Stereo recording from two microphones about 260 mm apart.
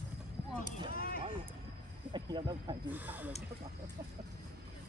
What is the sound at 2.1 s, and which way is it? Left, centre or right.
Speech, centre.